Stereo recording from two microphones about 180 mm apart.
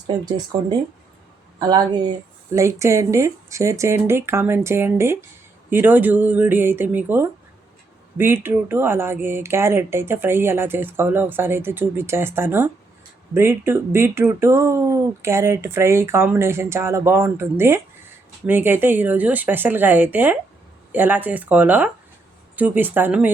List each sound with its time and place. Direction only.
1.5 s a woman's voice: 20° right (ahead or behind)